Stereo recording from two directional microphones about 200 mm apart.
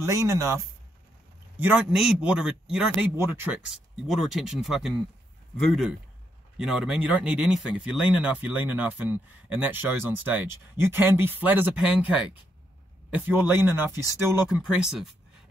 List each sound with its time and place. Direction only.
0.0 s speech: 15° right (ahead or behind)
1.6 s speech: 5° right (ahead or behind)
13.1 s speech: 10° right (ahead or behind)